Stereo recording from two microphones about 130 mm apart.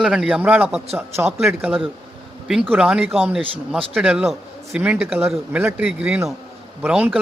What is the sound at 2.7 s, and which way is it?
A man's voice, 10° right (ahead or behind).